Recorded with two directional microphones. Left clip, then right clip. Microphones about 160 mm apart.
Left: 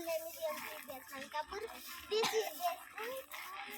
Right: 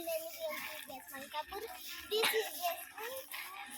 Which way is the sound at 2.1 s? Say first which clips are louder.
Right 1 dB; 25° left (ahead or behind).